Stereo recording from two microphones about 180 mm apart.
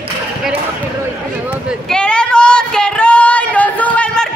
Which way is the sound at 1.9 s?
5° left (ahead or behind).